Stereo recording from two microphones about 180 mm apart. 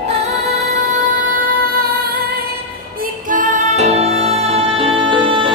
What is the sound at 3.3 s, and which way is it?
Music, 45° right (ahead or behind).